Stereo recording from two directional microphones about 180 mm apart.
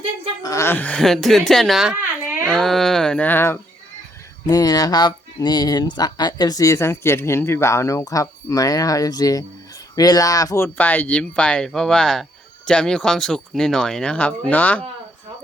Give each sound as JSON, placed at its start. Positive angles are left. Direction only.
{"t": 0.4, "sound": "speech", "side_deg": 15}
{"t": 2.4, "sound": "speech", "side_deg": 0}